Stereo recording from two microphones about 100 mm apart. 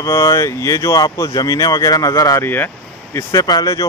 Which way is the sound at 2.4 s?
20° left (ahead or behind).